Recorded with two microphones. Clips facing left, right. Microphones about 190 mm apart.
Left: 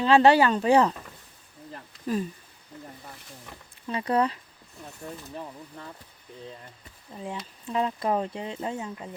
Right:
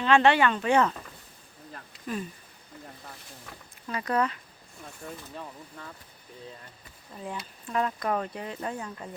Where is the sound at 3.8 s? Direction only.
30° left (ahead or behind).